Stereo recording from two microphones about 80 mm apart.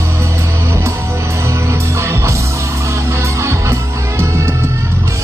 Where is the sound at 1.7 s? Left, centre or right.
Right.